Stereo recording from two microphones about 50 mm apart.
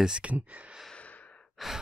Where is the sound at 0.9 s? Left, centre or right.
Left.